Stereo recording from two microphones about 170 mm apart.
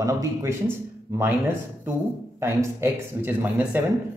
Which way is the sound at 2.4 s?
15° right (ahead or behind).